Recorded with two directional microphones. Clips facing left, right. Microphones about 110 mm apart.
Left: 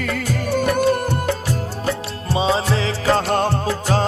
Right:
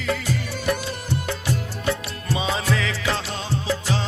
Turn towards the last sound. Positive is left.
turn(degrees=45)  # may be behind; listen again after turning